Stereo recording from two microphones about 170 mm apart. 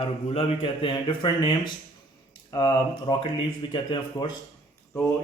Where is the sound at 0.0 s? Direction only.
35° left (ahead or behind).